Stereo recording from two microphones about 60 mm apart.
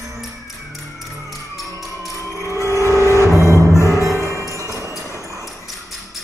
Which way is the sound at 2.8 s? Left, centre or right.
Left.